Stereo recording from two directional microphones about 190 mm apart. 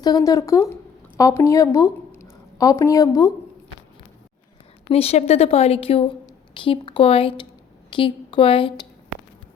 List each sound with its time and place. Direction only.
0.0 s a woman's voice: 20° left (ahead or behind)
4.9 s a woman's voice: 30° left (ahead or behind)